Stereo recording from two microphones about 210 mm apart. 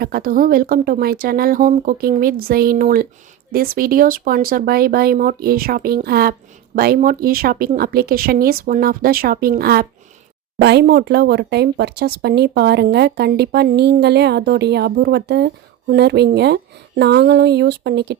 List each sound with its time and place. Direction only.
0.0 s speech: 45° right (ahead or behind)